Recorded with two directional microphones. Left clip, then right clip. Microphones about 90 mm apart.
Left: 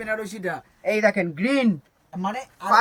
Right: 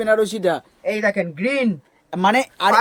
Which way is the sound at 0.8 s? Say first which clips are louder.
Left 3 dB; 10° right (ahead or behind).